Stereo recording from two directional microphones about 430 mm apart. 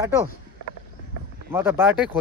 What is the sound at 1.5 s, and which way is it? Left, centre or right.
Speech, centre.